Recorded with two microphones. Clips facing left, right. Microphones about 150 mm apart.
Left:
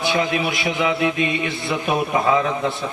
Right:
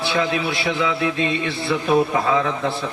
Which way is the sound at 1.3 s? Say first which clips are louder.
Right 1 dB; 15° left (ahead or behind).